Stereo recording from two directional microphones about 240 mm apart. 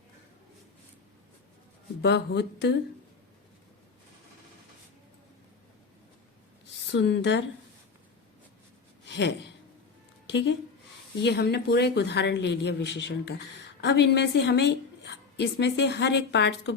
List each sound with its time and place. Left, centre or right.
2.0 s a woman's voice: left
6.9 s a woman's voice: left
9.0 s a sound: left
10.2 s a woman's voice: left